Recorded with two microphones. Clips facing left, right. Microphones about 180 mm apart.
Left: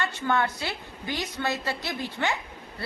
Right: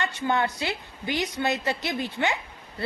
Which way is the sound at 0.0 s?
20° right (ahead or behind).